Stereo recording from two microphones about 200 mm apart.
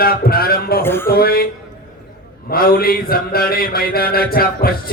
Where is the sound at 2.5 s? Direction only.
50° left (ahead or behind).